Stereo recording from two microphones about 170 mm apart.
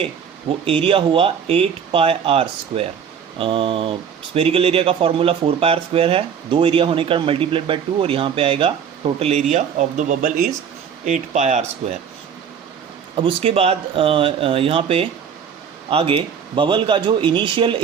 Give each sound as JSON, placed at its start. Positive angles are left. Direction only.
{"t": 0.6, "sound": "speech", "side_deg": -35}
{"t": 13.2, "sound": "speech", "side_deg": -35}